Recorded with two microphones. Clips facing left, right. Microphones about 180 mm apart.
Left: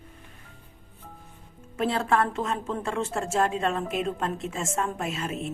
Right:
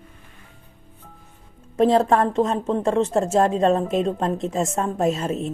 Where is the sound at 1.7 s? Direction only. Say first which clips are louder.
Right 8 dB; 35° right (ahead or behind).